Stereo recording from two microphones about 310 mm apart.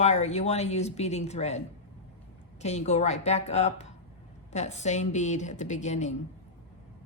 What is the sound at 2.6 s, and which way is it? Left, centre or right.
Speech, left.